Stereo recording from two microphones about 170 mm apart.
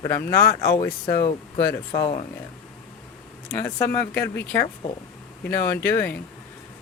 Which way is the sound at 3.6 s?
15° left (ahead or behind).